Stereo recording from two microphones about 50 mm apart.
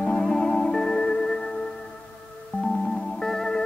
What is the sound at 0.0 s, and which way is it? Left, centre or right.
Music, centre.